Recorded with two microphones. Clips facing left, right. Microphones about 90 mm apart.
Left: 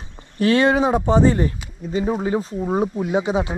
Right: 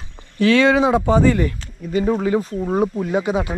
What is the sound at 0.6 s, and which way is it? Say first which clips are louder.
Speech: right 2 dB; 90° right.